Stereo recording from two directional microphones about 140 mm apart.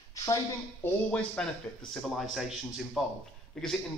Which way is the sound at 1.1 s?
5° left (ahead or behind).